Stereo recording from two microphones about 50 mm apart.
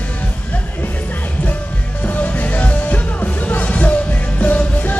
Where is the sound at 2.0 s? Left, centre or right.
Left.